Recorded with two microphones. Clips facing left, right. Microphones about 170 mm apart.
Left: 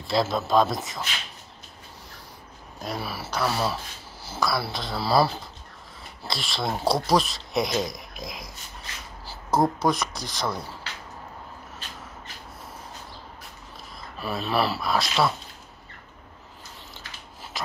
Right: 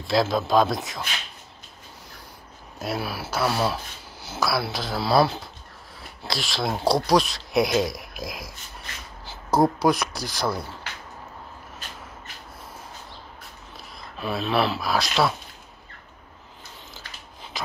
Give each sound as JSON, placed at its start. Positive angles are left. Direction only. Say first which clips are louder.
{"t": 0.0, "sound": "speech", "louder": "right 2 dB", "side_deg": 0}
{"t": 2.8, "sound": "speech", "louder": "right 3 dB", "side_deg": -5}
{"t": 9.6, "sound": "speech", "louder": "right 3 dB", "side_deg": 0}
{"t": 14.2, "sound": "speech", "louder": "right 2 dB", "side_deg": 5}